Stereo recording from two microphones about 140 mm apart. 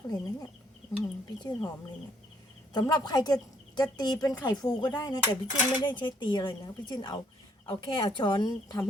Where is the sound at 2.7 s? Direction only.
30° left (ahead or behind).